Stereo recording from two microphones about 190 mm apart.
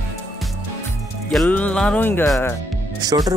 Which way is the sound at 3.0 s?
20° right (ahead or behind).